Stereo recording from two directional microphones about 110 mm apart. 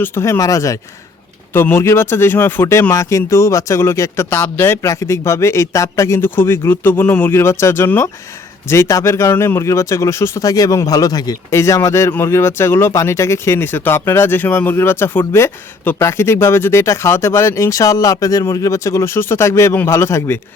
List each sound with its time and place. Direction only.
0.0 s speech: 20° left (ahead or behind)